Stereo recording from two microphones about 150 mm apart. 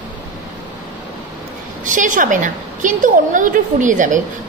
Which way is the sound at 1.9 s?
60° right (ahead or behind).